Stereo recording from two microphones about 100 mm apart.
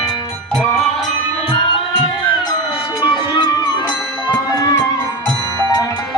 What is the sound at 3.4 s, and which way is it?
Music, 45° left (ahead or behind).